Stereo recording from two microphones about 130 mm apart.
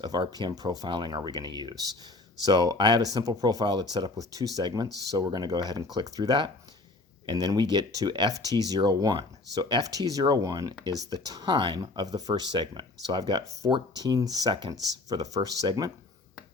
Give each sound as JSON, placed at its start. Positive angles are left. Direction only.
{"t": 0.0, "sound": "speech", "side_deg": -30}